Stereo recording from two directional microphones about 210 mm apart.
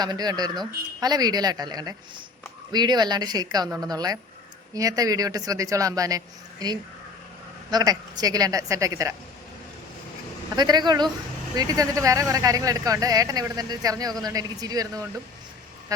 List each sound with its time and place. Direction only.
0.0 s a woman's voice: 20° right (ahead or behind)
10.5 s a woman's voice: 20° right (ahead or behind)